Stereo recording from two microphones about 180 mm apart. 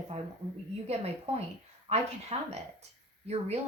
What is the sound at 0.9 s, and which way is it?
A woman's voice, 35° right (ahead or behind).